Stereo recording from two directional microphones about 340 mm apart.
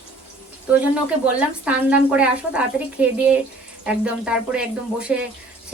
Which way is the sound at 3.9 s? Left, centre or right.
Centre.